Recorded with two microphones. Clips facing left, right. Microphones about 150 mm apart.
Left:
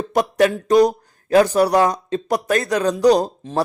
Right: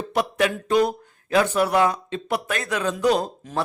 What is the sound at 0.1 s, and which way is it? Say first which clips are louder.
Speech: left 6 dB; 40° left (ahead or behind).